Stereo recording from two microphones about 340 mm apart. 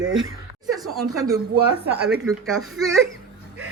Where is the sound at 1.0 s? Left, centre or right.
Centre.